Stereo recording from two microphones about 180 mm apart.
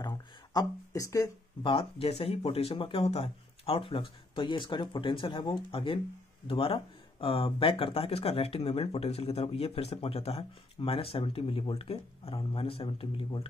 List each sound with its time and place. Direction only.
0.0 s speech: 20° left (ahead or behind)